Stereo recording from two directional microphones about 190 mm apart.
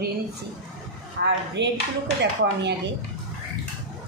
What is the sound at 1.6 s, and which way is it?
A woman's voice, 65° right (ahead or behind).